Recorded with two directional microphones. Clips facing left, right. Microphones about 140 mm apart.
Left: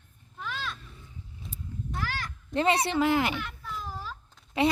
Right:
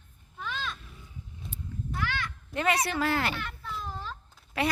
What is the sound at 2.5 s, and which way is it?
Speech, 25° left (ahead or behind).